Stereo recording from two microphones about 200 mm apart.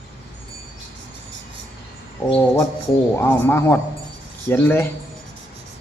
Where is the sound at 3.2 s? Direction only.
10° left (ahead or behind).